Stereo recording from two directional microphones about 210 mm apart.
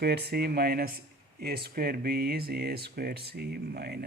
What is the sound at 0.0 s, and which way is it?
Speech, 50° right (ahead or behind).